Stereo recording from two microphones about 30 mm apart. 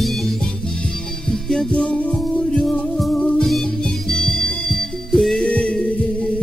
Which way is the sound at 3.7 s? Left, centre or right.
Centre.